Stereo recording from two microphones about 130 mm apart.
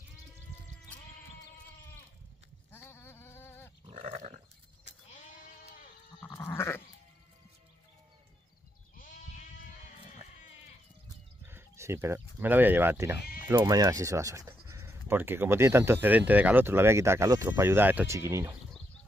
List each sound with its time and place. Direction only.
2.7 s a sound: 15° left (ahead or behind)
3.8 s goat: 45° right (ahead or behind)
5.1 s bleat: 90° left
6.3 s goat: 20° left (ahead or behind)
8.9 s sheep: 90° left
11.4 s speech: 20° right (ahead or behind)
13.6 s speech: 30° right (ahead or behind)